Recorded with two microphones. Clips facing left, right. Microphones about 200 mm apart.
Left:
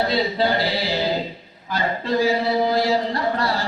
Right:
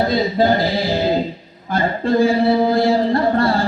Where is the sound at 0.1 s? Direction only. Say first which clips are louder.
Right 5 dB; 45° right (ahead or behind).